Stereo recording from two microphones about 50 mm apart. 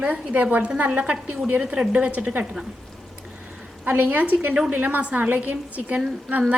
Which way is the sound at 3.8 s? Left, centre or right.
Right.